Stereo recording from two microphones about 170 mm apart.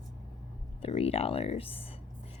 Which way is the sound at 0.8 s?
35° left (ahead or behind).